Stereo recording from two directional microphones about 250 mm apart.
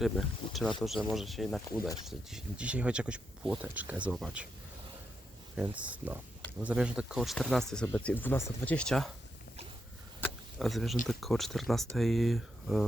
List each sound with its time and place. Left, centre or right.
0.4 s a sound: left
0.8 s speech: centre
5.5 s speech: centre
10.2 s power windows: centre
11.1 s speech: centre